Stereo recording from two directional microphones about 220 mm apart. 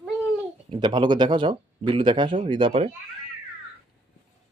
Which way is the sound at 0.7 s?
20° right (ahead or behind).